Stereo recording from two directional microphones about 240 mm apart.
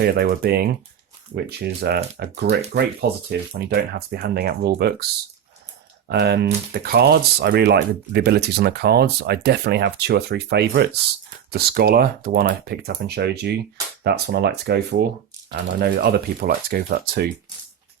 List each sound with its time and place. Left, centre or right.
0.0 s speech: right
6.1 s speech: right